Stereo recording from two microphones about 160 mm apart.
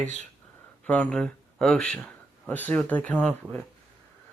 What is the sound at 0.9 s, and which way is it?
Speech, 10° left (ahead or behind).